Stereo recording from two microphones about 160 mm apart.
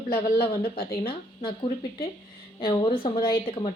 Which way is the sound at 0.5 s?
70° left (ahead or behind).